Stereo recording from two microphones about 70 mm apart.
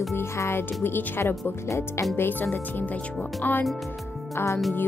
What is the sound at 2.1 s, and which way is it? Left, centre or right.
Speech, left.